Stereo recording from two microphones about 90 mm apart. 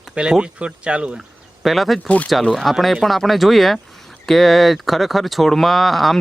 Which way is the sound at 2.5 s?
Centre (ahead or behind).